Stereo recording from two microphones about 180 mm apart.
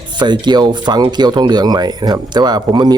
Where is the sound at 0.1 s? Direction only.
25° right (ahead or behind).